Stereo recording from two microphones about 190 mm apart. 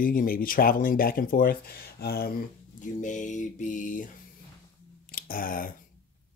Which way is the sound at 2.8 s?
40° left (ahead or behind).